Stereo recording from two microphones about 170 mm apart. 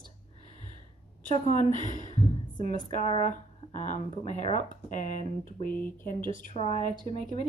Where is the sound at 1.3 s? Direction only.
45° left (ahead or behind).